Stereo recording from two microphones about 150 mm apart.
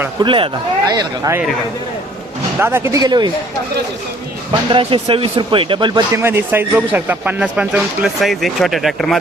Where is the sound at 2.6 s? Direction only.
15° right (ahead or behind).